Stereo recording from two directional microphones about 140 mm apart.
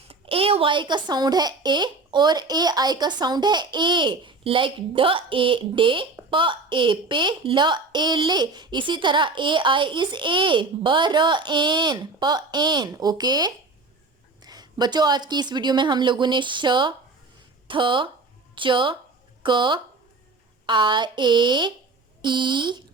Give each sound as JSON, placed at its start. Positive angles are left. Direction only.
{"t": 0.1, "sound": "a woman's voice", "side_deg": -40}